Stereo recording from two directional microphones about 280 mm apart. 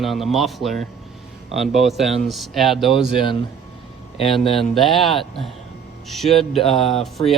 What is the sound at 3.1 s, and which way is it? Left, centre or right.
Speech, centre.